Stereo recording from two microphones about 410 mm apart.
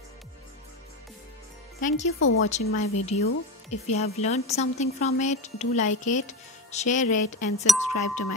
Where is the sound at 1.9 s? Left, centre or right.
Centre.